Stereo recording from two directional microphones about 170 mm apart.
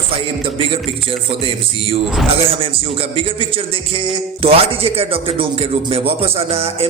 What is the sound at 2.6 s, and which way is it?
Speech, 35° right (ahead or behind).